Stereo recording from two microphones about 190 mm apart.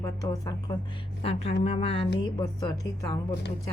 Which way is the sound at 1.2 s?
30° left (ahead or behind).